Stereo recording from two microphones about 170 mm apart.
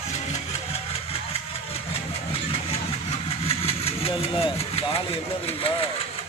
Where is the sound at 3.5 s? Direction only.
35° left (ahead or behind).